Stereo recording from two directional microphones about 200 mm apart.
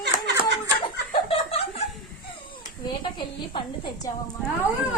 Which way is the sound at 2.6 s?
20° left (ahead or behind).